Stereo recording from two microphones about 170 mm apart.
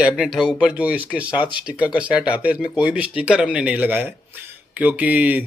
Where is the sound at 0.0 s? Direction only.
Centre (ahead or behind).